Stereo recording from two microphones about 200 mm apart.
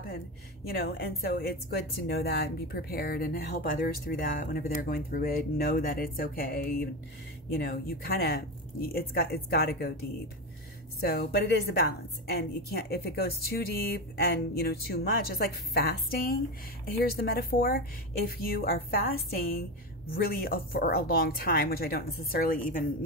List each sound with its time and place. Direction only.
0.7 s a woman's voice: 50° left (ahead or behind)
11.0 s a woman's voice: 50° left (ahead or behind)